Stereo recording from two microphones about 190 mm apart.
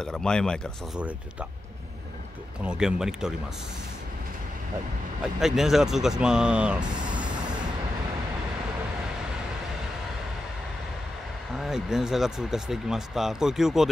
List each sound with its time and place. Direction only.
0.0 s speech: 5° left (ahead or behind)
2.6 s speech: 5° right (ahead or behind)
5.4 s speech: centre (ahead or behind)
6.8 s speech: 25° right (ahead or behind)
11.5 s speech: centre (ahead or behind)